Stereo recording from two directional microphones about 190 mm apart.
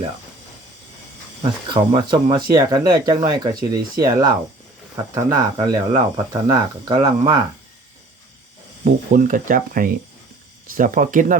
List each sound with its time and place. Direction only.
1.4 s speech: 25° right (ahead or behind)
8.8 s speech: 45° right (ahead or behind)